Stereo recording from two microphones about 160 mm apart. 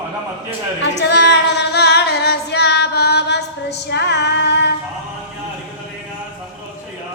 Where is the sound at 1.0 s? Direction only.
90° left.